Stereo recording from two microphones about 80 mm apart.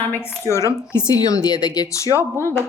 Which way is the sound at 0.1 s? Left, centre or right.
Left.